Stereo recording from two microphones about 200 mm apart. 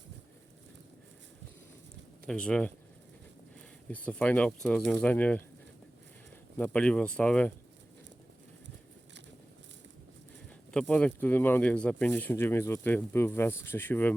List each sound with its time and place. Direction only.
2.2 s speech: 5° left (ahead or behind)
3.8 s speech: 5° left (ahead or behind)
6.6 s speech: 5° left (ahead or behind)
10.7 s speech: 5° left (ahead or behind)